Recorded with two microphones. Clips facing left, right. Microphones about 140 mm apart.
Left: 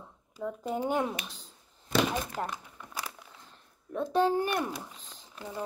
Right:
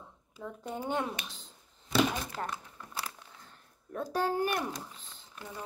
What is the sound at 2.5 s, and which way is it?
Crumpling, 15° left (ahead or behind).